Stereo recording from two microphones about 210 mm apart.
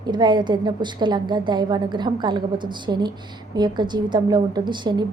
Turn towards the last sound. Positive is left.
turn(degrees=-20)  # may be behind; listen again after turning